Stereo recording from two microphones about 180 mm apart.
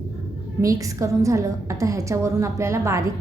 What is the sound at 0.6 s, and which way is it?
A woman's voice, 20° right (ahead or behind).